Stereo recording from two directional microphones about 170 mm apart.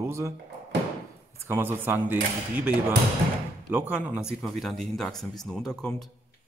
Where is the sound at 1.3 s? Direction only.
15° right (ahead or behind); by 6.1 s 5° left (ahead or behind).